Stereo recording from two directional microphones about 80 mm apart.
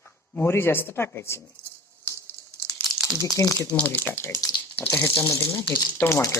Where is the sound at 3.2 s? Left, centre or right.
Left.